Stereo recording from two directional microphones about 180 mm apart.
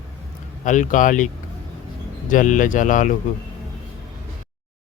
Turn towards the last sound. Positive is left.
turn(degrees=45)  # may be behind; listen again after turning